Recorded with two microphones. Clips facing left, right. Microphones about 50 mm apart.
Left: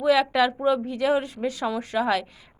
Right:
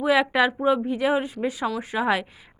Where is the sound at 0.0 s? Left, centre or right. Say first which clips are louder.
Even; centre.